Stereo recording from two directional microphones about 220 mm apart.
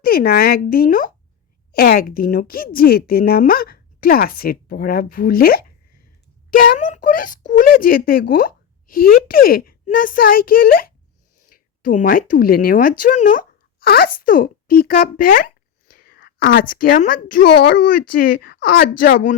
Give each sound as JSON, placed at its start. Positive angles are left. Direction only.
{"t": 0.0, "sound": "a woman's voice", "side_deg": 45}
{"t": 17.5, "sound": "speech", "side_deg": 50}